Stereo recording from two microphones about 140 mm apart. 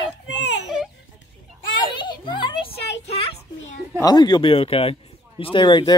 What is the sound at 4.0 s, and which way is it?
Speech, 30° left (ahead or behind).